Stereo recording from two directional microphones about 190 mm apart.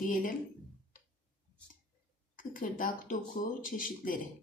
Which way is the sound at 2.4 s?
45° left (ahead or behind).